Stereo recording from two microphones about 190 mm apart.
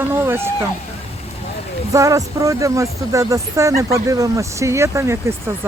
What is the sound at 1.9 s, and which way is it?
Speech, 15° right (ahead or behind).